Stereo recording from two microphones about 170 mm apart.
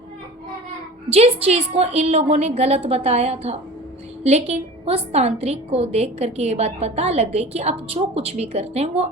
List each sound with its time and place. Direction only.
1.1 s a woman's voice: 35° right (ahead or behind)